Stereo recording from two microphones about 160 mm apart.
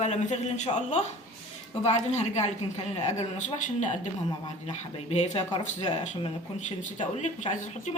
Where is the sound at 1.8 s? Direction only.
40° left (ahead or behind).